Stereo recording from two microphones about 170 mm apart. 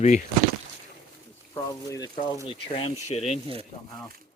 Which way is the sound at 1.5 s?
20° left (ahead or behind).